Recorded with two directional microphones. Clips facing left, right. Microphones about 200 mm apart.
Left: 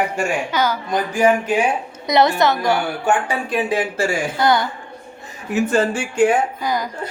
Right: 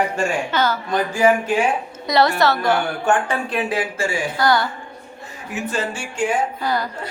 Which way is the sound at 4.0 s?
45° left (ahead or behind).